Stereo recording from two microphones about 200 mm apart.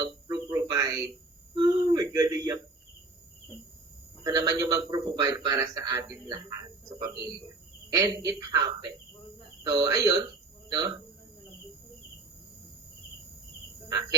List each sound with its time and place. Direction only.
0.0 s a sound: 15° right (ahead or behind)
4.2 s speech: 20° right (ahead or behind)
7.9 s speech: 15° right (ahead or behind)